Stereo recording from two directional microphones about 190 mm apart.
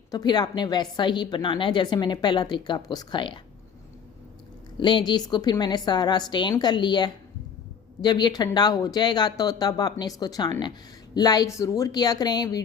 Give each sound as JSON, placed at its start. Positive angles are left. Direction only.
{"t": 0.1, "sound": "a woman's voice", "side_deg": 20}
{"t": 4.8, "sound": "a woman's voice", "side_deg": 25}